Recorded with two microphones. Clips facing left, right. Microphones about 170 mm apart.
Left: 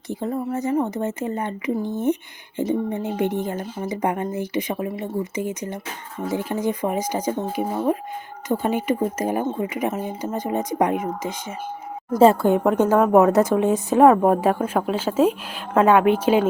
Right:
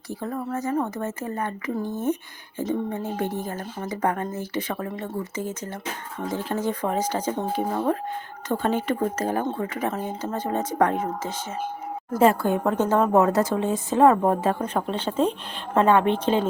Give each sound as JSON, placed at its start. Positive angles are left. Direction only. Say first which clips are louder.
{"t": 0.1, "sound": "a woman's voice", "louder": "left 4 dB", "side_deg": 20}
{"t": 12.2, "sound": "a woman's voice", "louder": "left 5 dB", "side_deg": 25}